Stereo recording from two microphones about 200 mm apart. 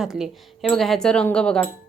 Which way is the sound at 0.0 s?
Centre (ahead or behind).